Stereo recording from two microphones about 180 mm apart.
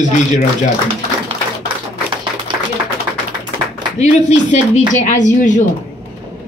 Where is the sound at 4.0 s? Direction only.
40° left (ahead or behind).